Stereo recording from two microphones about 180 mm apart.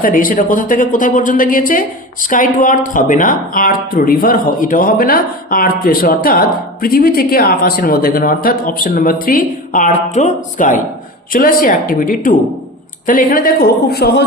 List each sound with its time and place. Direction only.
0.0 s a woman's voice: 50° left (ahead or behind)